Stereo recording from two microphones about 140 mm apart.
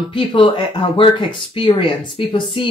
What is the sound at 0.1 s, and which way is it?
Speech, 35° left (ahead or behind).